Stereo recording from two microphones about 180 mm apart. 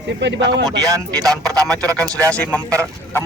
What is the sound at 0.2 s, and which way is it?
Speech, 75° right (ahead or behind).